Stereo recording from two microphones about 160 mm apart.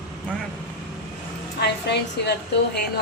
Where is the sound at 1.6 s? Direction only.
90° left.